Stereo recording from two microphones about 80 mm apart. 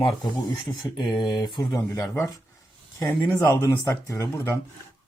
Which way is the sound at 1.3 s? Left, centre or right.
Left.